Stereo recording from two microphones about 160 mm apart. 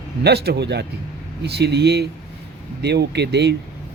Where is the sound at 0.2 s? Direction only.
90° right.